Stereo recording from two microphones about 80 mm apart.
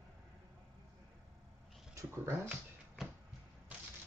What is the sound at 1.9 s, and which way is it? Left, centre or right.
Speech, right.